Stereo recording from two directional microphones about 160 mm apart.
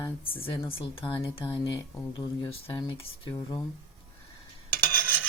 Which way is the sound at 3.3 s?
20° left (ahead or behind).